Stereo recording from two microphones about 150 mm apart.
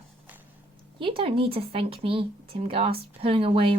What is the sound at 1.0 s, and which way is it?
Speech, 35° right (ahead or behind).